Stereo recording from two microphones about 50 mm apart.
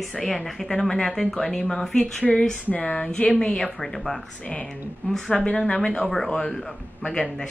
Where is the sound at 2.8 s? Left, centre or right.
Centre.